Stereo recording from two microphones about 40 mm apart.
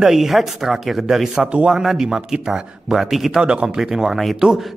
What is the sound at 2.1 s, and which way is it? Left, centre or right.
Speech, right.